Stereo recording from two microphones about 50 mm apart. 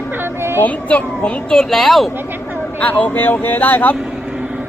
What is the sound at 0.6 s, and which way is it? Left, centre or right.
Speech, left.